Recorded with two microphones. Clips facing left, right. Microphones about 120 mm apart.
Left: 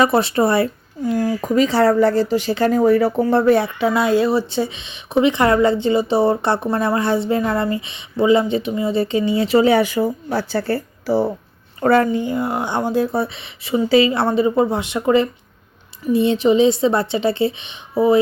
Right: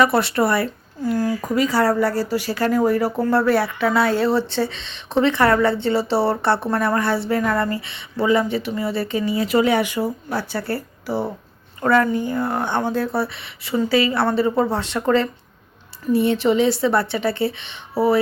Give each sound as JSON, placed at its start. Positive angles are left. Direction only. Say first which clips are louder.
{"t": 0.0, "sound": "speech", "louder": "left 2 dB", "side_deg": 25}